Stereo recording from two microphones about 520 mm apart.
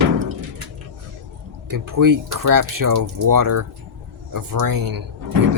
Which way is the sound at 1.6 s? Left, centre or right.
Right.